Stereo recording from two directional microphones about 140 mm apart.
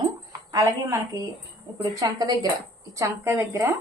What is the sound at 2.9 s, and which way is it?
Speech, 20° right (ahead or behind).